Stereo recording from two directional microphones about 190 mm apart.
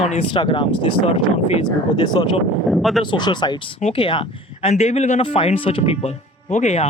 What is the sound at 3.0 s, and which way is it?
Speech, 25° left (ahead or behind).